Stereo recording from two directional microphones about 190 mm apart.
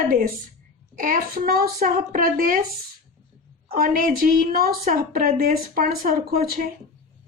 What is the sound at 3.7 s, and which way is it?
Speech, 50° right (ahead or behind).